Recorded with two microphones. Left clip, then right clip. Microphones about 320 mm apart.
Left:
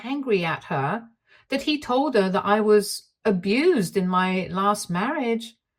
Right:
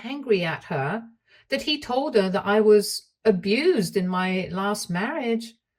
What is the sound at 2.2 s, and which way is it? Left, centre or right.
Speech, left.